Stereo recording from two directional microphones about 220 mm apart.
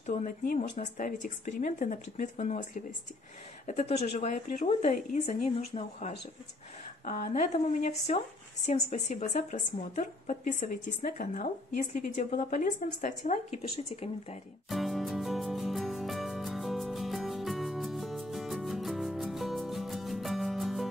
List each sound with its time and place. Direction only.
0.0 s a woman's voice: 35° left (ahead or behind)
14.7 s music: centre (ahead or behind)